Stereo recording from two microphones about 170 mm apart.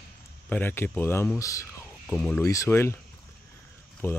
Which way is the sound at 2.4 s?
15° left (ahead or behind).